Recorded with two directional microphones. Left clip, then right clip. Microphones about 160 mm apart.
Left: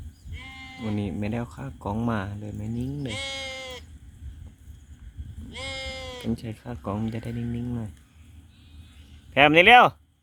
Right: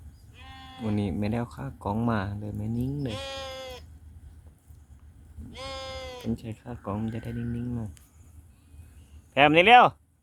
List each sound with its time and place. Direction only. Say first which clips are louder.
0.4 s sheep: left 4 dB; 40° left (ahead or behind)
0.8 s speech: right 1 dB; 5° right (ahead or behind)
3.1 s sheep: left 3 dB; 35° left (ahead or behind)
5.5 s sheep: left 3 dB; 30° left (ahead or behind)
6.3 s speech: left 3 dB; 10° left (ahead or behind)
9.3 s speech: left 2 dB; centre (ahead or behind)